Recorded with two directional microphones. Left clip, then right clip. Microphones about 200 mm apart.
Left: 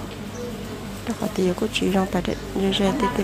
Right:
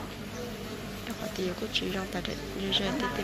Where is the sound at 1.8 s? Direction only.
30° left (ahead or behind).